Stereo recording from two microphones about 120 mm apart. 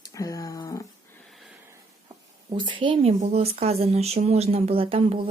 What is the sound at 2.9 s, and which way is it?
Speech, 60° right (ahead or behind).